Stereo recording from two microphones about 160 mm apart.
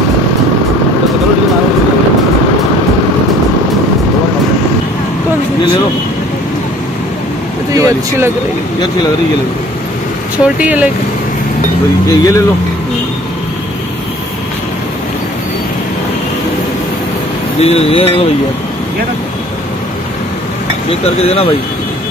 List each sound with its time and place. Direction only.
7.7 s speech: 20° right (ahead or behind)
10.6 s speech: 10° right (ahead or behind)
12.1 s speech: 20° left (ahead or behind)
17.6 s speech: 40° left (ahead or behind)
21.2 s speech: 40° left (ahead or behind)